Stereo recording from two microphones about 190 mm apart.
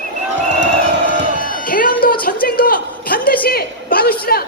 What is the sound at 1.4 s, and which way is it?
Music, 50° left (ahead or behind).